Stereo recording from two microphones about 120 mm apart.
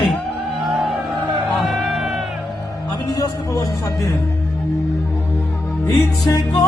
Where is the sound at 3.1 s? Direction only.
25° left (ahead or behind).